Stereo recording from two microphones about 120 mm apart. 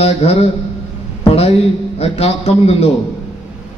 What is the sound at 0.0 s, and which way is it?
Speech, 60° left (ahead or behind).